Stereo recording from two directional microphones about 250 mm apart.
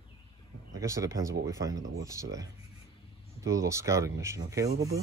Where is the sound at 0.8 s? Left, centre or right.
Centre.